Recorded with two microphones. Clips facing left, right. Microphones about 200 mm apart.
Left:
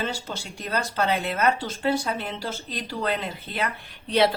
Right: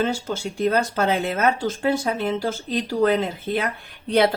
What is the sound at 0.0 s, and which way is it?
Speech, 50° right (ahead or behind).